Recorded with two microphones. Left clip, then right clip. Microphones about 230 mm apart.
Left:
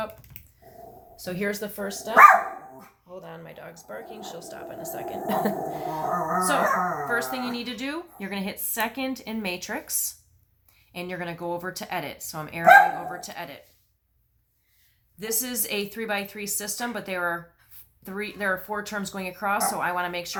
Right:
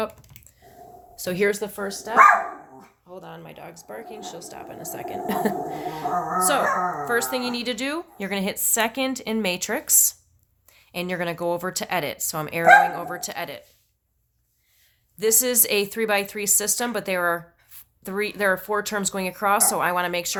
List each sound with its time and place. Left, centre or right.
1.1 s speech: right
1.5 s speech: right
7.0 s speech: right
15.2 s speech: right